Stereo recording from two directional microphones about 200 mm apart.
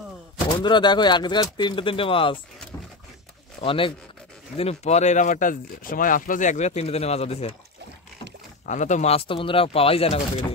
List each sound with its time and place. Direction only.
0.5 s speech: 25° left (ahead or behind)
3.6 s speech: 25° left (ahead or behind)
8.6 s speech: 35° left (ahead or behind)